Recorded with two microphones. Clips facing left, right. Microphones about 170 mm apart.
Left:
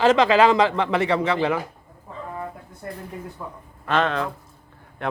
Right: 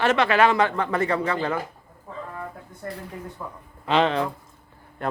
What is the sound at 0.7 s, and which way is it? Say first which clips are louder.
Speech: left 3 dB; 90° left.